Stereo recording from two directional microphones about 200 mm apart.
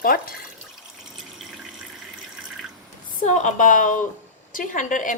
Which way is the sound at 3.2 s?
35° left (ahead or behind).